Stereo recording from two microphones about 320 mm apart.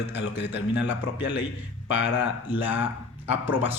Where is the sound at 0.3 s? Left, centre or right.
Left.